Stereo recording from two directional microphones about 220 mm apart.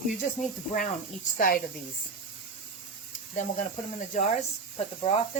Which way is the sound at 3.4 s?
35° left (ahead or behind).